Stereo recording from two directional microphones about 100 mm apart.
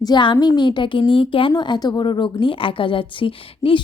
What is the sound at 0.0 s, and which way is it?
A woman's voice, 50° left (ahead or behind).